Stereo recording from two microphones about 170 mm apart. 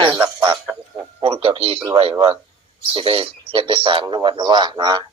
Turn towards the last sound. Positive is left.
turn(degrees=-25)  # may be behind; listen again after turning